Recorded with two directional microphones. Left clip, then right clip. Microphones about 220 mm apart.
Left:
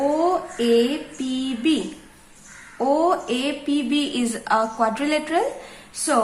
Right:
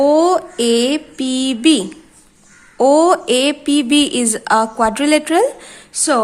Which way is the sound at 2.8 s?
50° right (ahead or behind).